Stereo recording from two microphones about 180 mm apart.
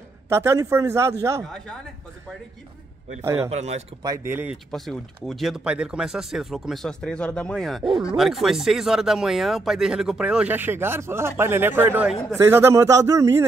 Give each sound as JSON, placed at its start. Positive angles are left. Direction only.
{"t": 0.3, "sound": "speech", "side_deg": -15}
{"t": 3.2, "sound": "speech", "side_deg": -15}
{"t": 3.4, "sound": "speech", "side_deg": -35}
{"t": 4.0, "sound": "speech", "side_deg": -15}
{"t": 4.6, "sound": "speech", "side_deg": 0}
{"t": 12.4, "sound": "speech", "side_deg": -15}